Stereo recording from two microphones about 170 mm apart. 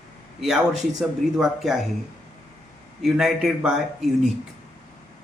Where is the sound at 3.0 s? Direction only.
Centre (ahead or behind).